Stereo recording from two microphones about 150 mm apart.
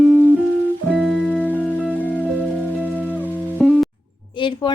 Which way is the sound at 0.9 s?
Centre (ahead or behind).